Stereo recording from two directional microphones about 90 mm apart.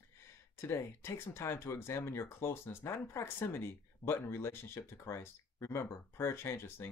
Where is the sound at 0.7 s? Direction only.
30° left (ahead or behind).